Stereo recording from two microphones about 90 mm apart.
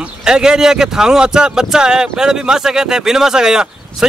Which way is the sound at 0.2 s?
5° right (ahead or behind).